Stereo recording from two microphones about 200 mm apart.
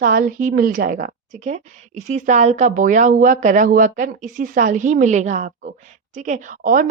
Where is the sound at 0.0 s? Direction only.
45° right (ahead or behind).